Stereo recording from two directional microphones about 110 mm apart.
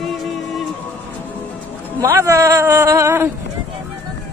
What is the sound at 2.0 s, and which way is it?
A man's voice, 25° right (ahead or behind).